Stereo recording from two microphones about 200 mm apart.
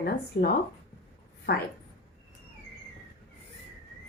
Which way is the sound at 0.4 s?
55° left (ahead or behind).